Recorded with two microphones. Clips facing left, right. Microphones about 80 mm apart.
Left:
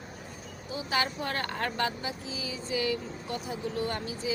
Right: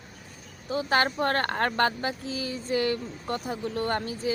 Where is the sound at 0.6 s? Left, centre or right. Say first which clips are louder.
Right 6 dB; right.